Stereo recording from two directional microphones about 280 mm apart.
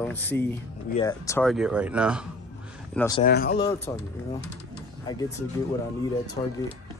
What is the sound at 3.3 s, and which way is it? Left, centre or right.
Speech, left.